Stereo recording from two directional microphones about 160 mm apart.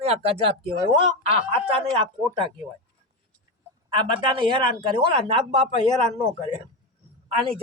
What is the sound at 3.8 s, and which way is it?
Speech, 30° right (ahead or behind).